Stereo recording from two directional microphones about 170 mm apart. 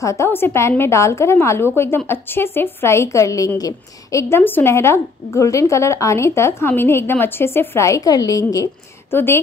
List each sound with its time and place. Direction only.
0.0 s a woman's voice: 15° left (ahead or behind)